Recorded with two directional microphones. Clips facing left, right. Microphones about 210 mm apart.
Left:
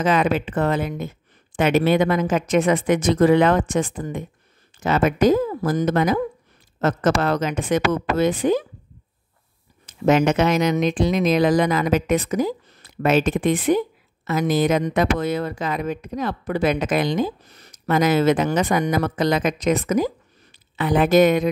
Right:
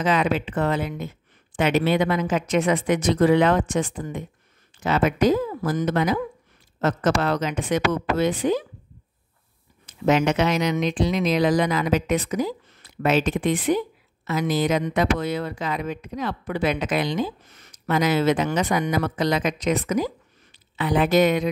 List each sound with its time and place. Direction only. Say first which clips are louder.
0.0 s a woman's voice: left 2 dB; 45° left (ahead or behind)
9.8 s a woman's voice: left 3 dB; 45° left (ahead or behind)